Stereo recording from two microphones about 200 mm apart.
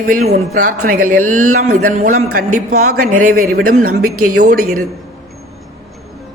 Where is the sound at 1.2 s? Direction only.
90° right.